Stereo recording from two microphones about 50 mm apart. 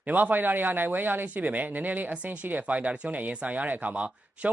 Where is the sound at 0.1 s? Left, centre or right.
Right.